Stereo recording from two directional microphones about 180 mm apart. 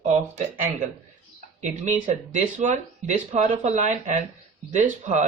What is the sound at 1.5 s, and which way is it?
Speech, 40° right (ahead or behind).